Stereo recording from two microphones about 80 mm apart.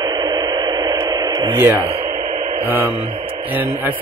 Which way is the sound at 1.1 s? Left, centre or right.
Right.